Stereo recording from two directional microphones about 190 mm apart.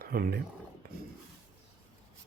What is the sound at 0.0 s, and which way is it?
Speech, 55° right (ahead or behind).